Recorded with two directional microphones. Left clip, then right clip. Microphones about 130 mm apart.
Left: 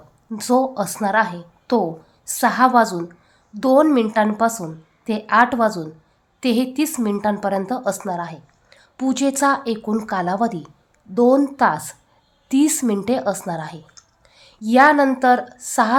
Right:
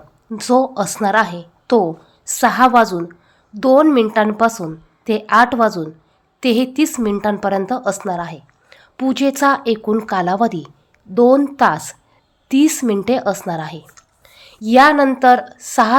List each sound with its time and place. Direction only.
0.3 s a woman's voice: 25° right (ahead or behind)